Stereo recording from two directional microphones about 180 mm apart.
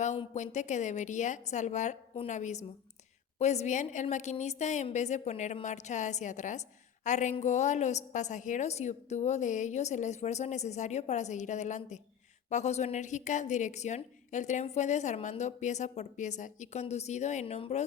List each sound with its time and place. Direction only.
0.3 s a woman's voice: 40° left (ahead or behind)